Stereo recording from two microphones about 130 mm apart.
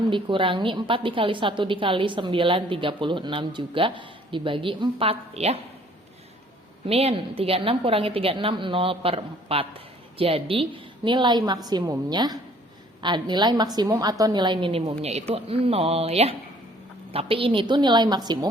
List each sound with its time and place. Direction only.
0.1 s a woman's voice: 40° right (ahead or behind)
6.8 s a woman's voice: 50° right (ahead or behind); by 18.3 s 35° right (ahead or behind)